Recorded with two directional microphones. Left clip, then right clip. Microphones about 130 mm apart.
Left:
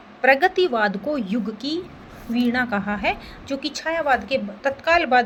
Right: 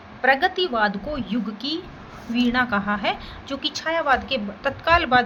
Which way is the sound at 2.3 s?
40° left (ahead or behind).